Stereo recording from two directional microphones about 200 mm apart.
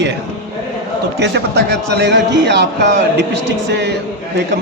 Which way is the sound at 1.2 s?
60° right (ahead or behind).